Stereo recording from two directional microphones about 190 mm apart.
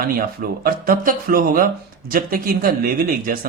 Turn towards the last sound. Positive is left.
turn(degrees=-50)  # may be behind; listen again after turning